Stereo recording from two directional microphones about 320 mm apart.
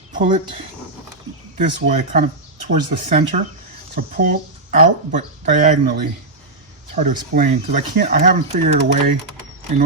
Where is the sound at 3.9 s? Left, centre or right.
Right.